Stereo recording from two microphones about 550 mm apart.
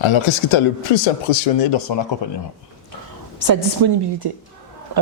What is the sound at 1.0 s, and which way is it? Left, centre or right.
Speech, left.